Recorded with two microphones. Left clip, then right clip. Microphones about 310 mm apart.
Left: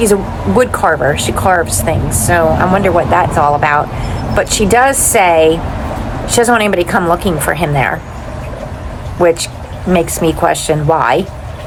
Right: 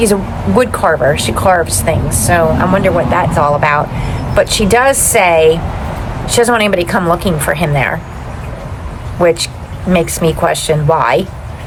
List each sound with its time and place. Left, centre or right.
0.0 s speech: centre
9.2 s speech: centre